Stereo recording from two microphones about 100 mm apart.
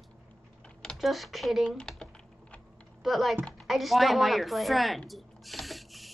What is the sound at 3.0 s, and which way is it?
Speech, centre (ahead or behind).